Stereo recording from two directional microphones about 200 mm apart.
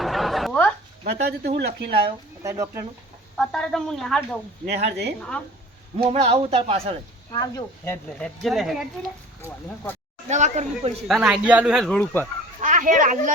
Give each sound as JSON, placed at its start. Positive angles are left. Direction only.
{"t": 0.0, "sound": "a sound", "side_deg": 0}
{"t": 1.0, "sound": "speech", "side_deg": -55}
{"t": 2.4, "sound": "speech", "side_deg": -15}
{"t": 3.3, "sound": "speech", "side_deg": 5}
{"t": 4.6, "sound": "speech", "side_deg": -55}
{"t": 6.0, "sound": "speech", "side_deg": -30}
{"t": 7.3, "sound": "speech", "side_deg": 15}
{"t": 8.2, "sound": "speech", "side_deg": 0}
{"t": 10.2, "sound": "speech", "side_deg": -35}
{"t": 11.1, "sound": "speech", "side_deg": -5}
{"t": 12.6, "sound": "speech", "side_deg": -40}